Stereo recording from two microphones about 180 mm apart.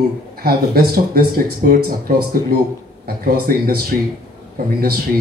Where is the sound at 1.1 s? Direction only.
55° right (ahead or behind).